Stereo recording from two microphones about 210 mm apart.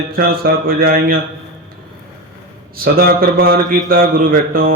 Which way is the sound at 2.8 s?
45° right (ahead or behind).